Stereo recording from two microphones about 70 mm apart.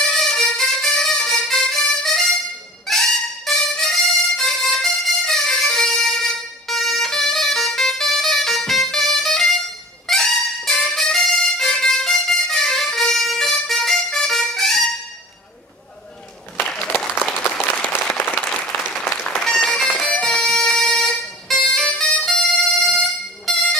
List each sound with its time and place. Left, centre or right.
0.0 s music: centre
18.0 s applause: left
18.4 s applause: centre
19.1 s music: centre